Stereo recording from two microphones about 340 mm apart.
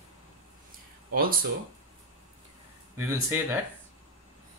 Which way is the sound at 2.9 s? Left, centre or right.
Centre.